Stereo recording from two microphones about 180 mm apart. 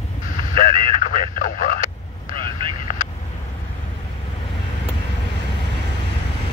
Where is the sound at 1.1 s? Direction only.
45° left (ahead or behind).